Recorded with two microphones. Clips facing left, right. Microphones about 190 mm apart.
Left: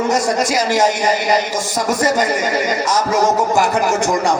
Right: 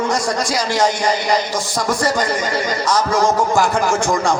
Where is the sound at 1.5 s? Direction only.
45° left (ahead or behind).